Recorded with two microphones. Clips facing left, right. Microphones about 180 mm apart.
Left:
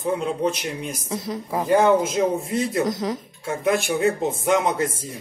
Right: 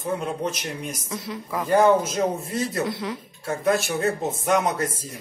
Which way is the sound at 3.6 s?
20° left (ahead or behind).